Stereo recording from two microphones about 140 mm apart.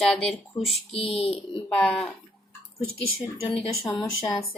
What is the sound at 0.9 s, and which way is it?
Speech, 40° left (ahead or behind).